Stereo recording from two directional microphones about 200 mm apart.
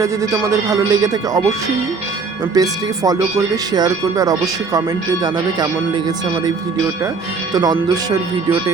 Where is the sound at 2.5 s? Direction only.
20° right (ahead or behind).